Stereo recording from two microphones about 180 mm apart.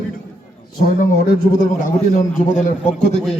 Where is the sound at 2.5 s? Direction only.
45° left (ahead or behind).